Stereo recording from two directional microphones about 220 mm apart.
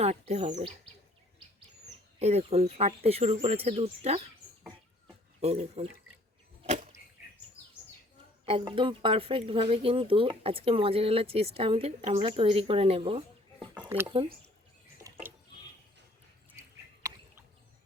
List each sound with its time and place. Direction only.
0.0 s speech: 30° right (ahead or behind)
2.1 s speech: 30° right (ahead or behind)
5.4 s speech: 25° right (ahead or behind)
8.4 s speech: 25° right (ahead or behind)
13.8 s speech: 10° right (ahead or behind)
14.9 s a sound: 15° right (ahead or behind)